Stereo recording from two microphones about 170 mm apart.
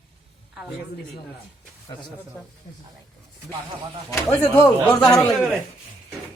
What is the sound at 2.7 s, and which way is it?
Speech, 45° left (ahead or behind).